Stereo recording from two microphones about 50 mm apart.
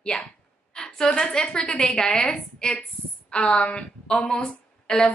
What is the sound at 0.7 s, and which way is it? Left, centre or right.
A woman's voice, centre.